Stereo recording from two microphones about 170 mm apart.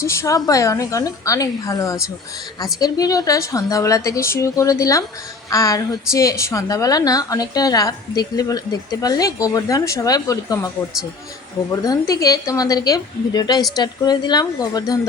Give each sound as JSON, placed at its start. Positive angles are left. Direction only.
{"t": 0.0, "sound": "a woman's voice", "side_deg": 15}
{"t": 11.7, "sound": "a woman's voice", "side_deg": 20}